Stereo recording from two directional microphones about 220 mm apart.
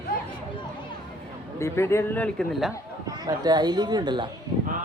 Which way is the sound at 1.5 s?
10° left (ahead or behind).